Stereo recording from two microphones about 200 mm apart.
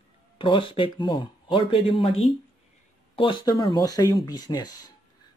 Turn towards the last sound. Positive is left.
turn(degrees=20)  # may be behind; listen again after turning